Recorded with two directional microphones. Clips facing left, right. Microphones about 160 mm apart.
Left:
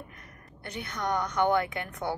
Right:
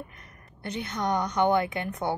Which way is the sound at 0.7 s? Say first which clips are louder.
Right 3 dB; 20° right (ahead or behind).